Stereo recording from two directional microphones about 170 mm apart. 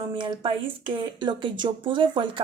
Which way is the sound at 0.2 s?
30° right (ahead or behind).